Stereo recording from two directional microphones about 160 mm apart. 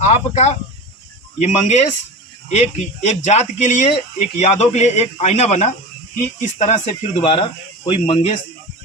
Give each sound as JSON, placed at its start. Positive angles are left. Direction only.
{"t": 0.0, "sound": "speech", "side_deg": 45}
{"t": 7.3, "sound": "speech", "side_deg": 35}